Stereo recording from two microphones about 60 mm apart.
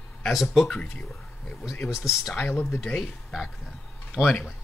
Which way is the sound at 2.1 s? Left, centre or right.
Centre.